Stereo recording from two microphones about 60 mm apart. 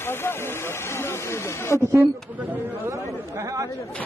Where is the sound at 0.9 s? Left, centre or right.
Left.